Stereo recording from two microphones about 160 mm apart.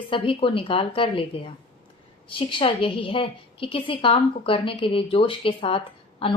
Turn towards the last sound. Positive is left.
turn(degrees=35)  # may be behind; listen again after turning